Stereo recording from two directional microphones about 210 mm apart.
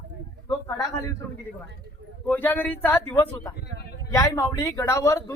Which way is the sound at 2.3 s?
10° left (ahead or behind).